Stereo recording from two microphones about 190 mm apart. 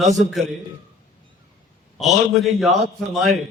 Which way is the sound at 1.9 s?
Centre (ahead or behind).